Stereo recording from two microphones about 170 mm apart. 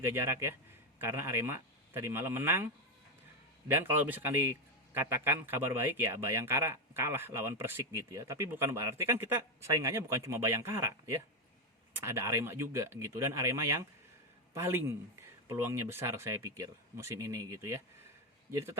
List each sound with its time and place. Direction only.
0.0 s speech: 15° right (ahead or behind)
3.7 s speech: 10° right (ahead or behind)